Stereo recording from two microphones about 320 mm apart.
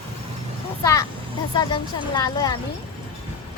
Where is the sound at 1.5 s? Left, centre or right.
Centre.